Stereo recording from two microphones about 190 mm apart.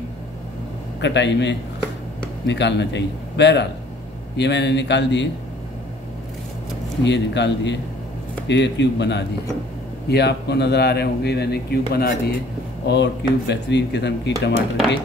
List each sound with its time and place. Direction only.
1.0 s a man's voice: 65° left (ahead or behind)
7.1 s a man's voice: 65° left (ahead or behind)